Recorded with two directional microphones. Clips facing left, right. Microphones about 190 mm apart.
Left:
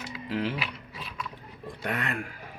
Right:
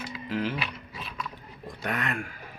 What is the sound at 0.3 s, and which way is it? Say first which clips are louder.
Speech: even; 30° left (ahead or behind).